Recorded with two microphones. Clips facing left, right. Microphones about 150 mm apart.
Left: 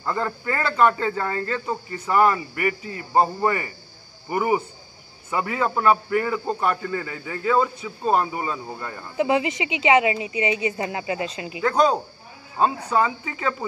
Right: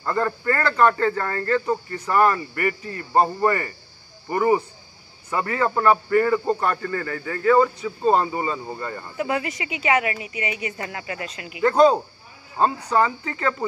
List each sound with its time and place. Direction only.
0.0 s speech: 10° left (ahead or behind)
9.1 s a woman's voice: 20° left (ahead or behind)
11.6 s speech: 5° right (ahead or behind)
12.5 s speech: 10° left (ahead or behind)